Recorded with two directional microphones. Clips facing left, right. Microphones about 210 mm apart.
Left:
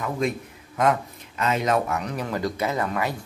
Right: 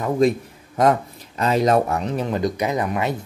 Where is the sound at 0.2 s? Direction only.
35° right (ahead or behind).